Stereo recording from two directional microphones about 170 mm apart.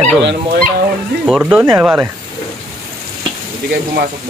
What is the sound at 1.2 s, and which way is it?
Speech, 5° right (ahead or behind).